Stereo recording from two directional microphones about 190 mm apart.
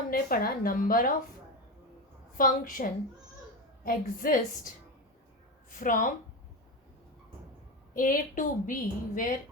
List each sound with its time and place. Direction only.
0.1 s a woman's voice: 50° left (ahead or behind)
2.4 s a woman's voice: 45° left (ahead or behind)
5.7 s a woman's voice: 45° left (ahead or behind)
7.9 s a woman's voice: 45° left (ahead or behind)